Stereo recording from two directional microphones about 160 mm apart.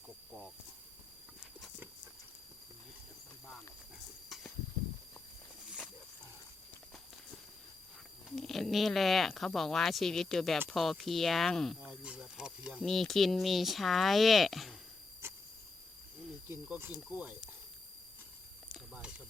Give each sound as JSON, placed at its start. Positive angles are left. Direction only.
{"t": 8.4, "sound": "speech", "side_deg": 0}
{"t": 15.2, "sound": "cricket", "side_deg": -15}
{"t": 16.6, "sound": "snake", "side_deg": -10}
{"t": 18.7, "sound": "a sound", "side_deg": -5}